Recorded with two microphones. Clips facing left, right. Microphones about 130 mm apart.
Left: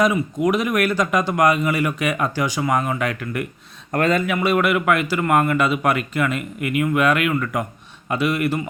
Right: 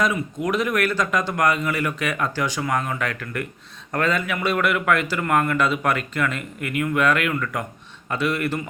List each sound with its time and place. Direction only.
0.0 s a man's voice: 15° left (ahead or behind)
3.9 s speech: 55° left (ahead or behind)
4.3 s a man's voice: 10° left (ahead or behind)